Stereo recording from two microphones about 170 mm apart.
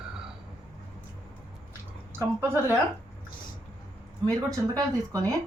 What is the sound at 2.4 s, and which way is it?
Speech, 15° right (ahead or behind).